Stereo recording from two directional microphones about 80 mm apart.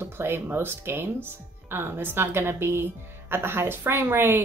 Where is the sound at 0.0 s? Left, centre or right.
Right.